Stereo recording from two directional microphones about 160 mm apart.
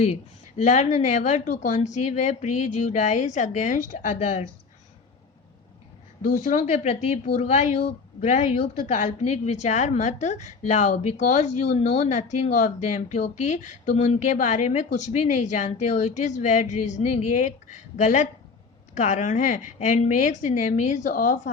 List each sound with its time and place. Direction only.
0.5 s speech: 45° left (ahead or behind)
6.2 s speech: 50° left (ahead or behind)